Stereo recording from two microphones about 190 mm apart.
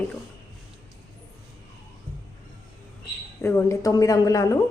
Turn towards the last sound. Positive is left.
turn(degrees=15)  # may be behind; listen again after turning